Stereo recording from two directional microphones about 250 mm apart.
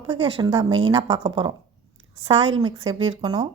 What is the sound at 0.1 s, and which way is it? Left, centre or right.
A woman's voice, centre.